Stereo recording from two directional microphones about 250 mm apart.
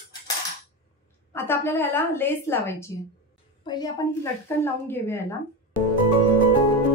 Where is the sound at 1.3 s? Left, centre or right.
Centre.